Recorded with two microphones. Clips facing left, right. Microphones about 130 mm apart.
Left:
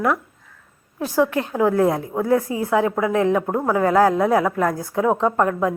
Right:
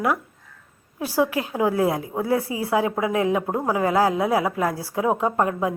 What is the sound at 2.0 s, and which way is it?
A woman's voice, 10° right (ahead or behind).